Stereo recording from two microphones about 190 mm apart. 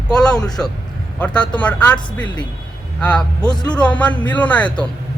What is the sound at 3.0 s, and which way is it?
Speech, 5° left (ahead or behind).